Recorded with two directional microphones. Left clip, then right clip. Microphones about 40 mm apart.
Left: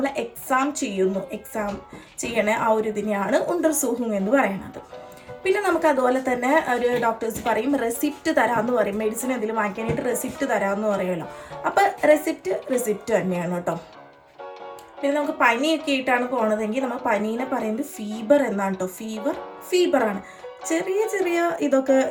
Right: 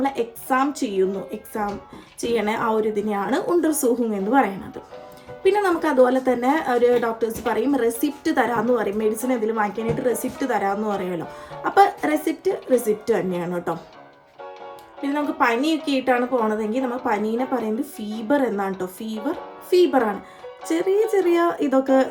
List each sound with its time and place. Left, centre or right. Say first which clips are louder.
0.0 s speech: right 2 dB; right
2.3 s a woman's voice: left 1 dB; right
11.9 s a woman's voice: left 6 dB; right
12.2 s speech: right 2 dB; right
15.0 s a woman's voice: left 1 dB; right